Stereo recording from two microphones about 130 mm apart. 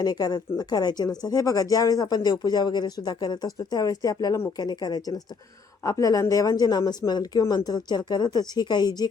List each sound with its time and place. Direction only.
0.0 s speech: 30° left (ahead or behind)